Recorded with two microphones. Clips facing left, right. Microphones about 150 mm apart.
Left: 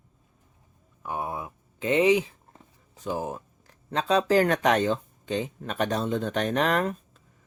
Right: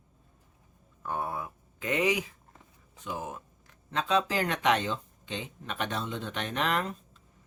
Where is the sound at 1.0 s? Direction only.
15° left (ahead or behind); by 6.9 s 45° left (ahead or behind).